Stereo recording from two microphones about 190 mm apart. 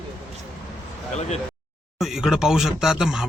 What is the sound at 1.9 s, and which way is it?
Speech, centre (ahead or behind).